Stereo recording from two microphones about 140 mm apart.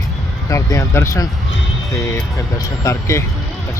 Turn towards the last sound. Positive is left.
turn(degrees=20)  # may be behind; listen again after turning